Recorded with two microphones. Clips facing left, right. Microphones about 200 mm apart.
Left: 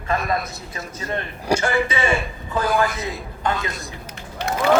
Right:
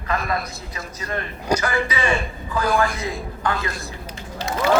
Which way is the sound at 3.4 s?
25° left (ahead or behind).